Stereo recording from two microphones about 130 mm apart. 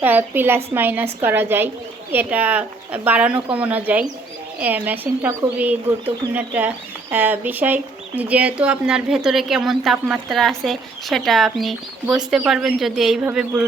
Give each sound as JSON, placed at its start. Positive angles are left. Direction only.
{"t": 0.0, "sound": "speech", "side_deg": -15}